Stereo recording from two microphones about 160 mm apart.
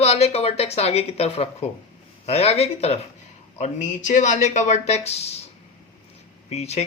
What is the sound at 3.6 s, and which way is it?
Speech, 50° left (ahead or behind).